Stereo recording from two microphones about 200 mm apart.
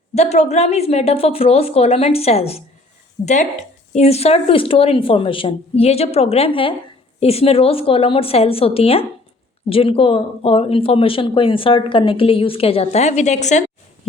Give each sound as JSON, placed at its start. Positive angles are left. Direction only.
{"t": 0.1, "sound": "a woman's voice", "side_deg": 35}
{"t": 3.9, "sound": "speech", "side_deg": 30}